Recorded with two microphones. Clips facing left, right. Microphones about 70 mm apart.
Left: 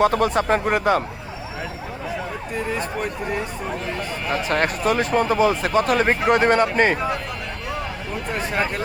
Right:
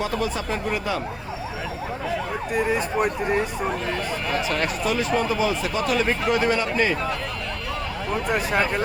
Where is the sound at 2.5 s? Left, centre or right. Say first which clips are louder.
Right 4 dB; centre.